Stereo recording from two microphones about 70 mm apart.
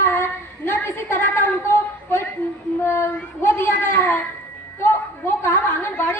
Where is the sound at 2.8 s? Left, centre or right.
Left.